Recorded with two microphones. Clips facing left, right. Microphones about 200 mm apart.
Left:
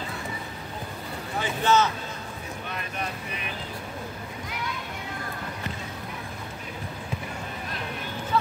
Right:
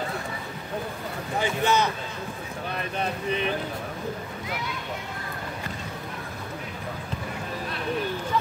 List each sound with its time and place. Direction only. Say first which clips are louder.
1.4 s speech: left 1 dB; 15° right (ahead or behind)
2.7 s vehicle: right 5 dB; 30° right (ahead or behind)